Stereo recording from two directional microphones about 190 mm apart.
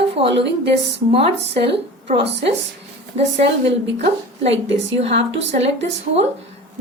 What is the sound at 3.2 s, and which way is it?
Speech, 35° right (ahead or behind).